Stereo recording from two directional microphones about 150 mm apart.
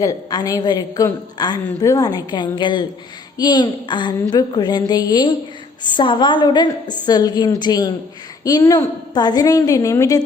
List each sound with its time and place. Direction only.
0.0 s a woman's voice: 25° left (ahead or behind)